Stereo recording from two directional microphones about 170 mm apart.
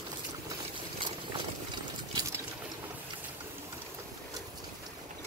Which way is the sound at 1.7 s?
20° right (ahead or behind).